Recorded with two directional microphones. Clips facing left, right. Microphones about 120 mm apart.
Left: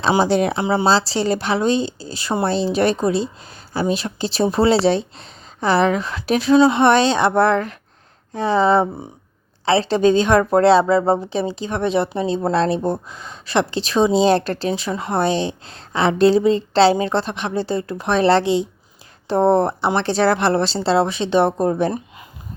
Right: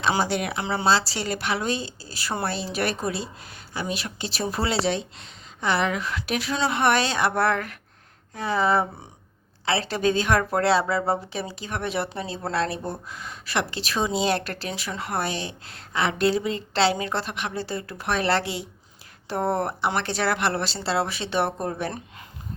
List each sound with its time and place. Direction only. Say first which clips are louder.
0.1 s a woman's voice: left 9 dB; 30° left (ahead or behind)
0.6 s speech: left 9 dB; 15° left (ahead or behind)
0.9 s a woman's voice: left 3 dB; 30° left (ahead or behind)